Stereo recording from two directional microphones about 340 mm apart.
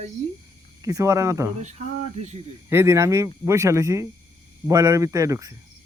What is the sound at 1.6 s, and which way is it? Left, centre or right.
Speech, centre.